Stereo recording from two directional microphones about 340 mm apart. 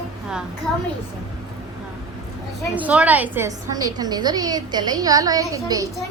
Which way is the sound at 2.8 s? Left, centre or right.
Centre.